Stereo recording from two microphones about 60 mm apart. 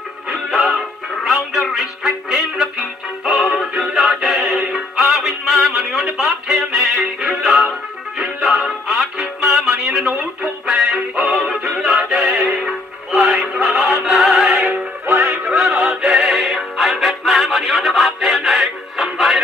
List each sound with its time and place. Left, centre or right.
0.6 s music: centre
15.3 s synthetic singing: centre
15.6 s music: centre